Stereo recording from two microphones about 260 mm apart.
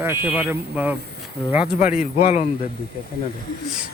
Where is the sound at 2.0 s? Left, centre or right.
Left.